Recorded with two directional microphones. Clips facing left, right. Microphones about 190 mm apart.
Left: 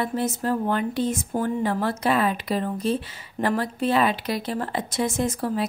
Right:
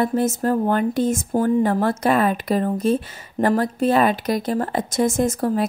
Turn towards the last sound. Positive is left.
turn(degrees=-45)  # may be behind; listen again after turning